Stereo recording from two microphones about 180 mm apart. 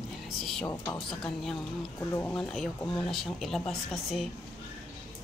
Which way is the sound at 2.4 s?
Centre (ahead or behind).